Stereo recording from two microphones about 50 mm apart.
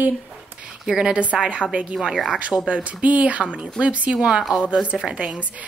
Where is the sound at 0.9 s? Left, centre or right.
Centre.